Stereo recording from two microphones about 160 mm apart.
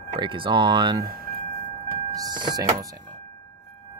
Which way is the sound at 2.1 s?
25° right (ahead or behind).